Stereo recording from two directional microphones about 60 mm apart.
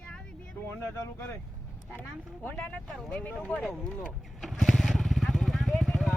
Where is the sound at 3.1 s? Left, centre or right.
Left.